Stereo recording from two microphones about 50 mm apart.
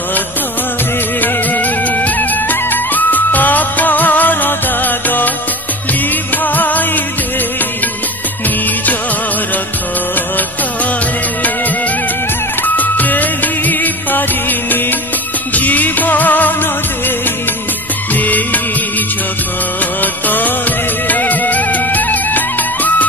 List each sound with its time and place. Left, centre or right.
1.2 s music: left
6.3 s music: left
12.6 s music of bollywood: left
15.5 s music: left
18.2 s music: left
20.0 s music: left